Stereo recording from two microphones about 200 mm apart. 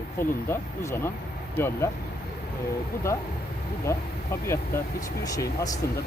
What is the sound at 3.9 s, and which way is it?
Speech, 15° left (ahead or behind).